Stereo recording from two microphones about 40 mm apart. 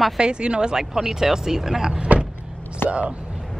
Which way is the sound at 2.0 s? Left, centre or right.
Right.